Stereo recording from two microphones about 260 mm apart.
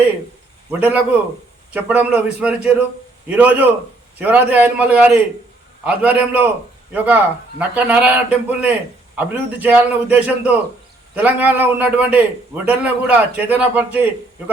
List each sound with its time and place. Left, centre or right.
0.7 s a man's voice: centre